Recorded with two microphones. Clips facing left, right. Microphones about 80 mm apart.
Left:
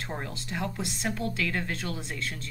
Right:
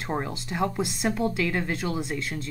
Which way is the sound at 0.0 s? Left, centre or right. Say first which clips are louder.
Right 6 dB; centre.